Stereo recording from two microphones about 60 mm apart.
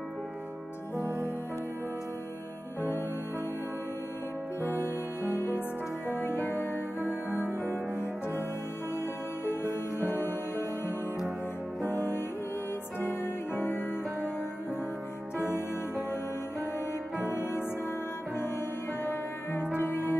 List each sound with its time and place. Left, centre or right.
0.9 s music: right
4.6 s music: left
10.0 s music: left
13.0 s music: left
15.3 s music: left
17.3 s music: left
19.0 s music: left